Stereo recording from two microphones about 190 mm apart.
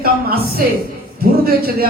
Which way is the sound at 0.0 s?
50° right (ahead or behind).